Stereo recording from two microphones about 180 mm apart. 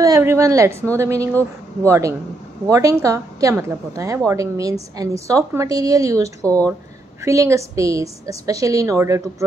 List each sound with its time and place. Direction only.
0.0 s a woman's voice: 15° right (ahead or behind)
6.4 s speech: 5° left (ahead or behind)
7.2 s a woman's voice: 15° right (ahead or behind)